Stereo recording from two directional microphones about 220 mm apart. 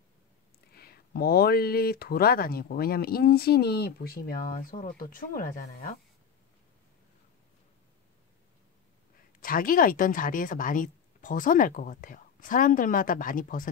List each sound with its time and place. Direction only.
0.7 s speech: 45° left (ahead or behind)
9.4 s a woman's voice: 40° left (ahead or behind)